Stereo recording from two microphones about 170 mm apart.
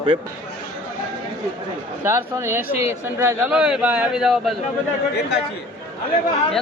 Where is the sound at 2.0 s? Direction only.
15° right (ahead or behind).